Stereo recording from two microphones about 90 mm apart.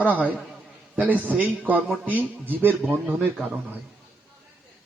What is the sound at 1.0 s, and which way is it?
A man's voice, 15° right (ahead or behind).